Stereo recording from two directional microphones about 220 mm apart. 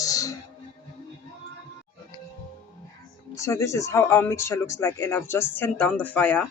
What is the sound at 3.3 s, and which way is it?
Speech, 15° left (ahead or behind).